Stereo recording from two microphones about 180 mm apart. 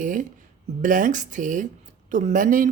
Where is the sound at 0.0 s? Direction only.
45° right (ahead or behind).